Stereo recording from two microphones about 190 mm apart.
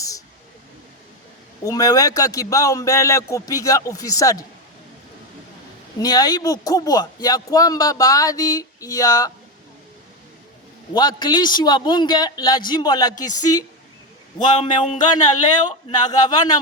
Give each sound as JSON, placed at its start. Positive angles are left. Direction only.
{"t": 1.6, "sound": "speech", "side_deg": 20}
{"t": 6.0, "sound": "speech", "side_deg": 20}
{"t": 10.9, "sound": "speech", "side_deg": 25}
{"t": 14.6, "sound": "music", "side_deg": 35}
{"t": 15.0, "sound": "speech", "side_deg": 20}